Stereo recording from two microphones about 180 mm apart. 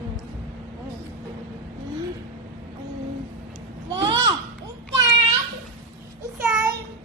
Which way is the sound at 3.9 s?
25° right (ahead or behind).